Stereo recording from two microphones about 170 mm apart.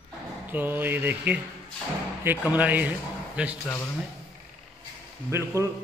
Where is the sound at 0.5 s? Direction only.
10° right (ahead or behind).